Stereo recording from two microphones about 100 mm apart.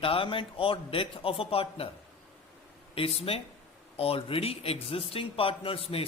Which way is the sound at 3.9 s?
70° left (ahead or behind).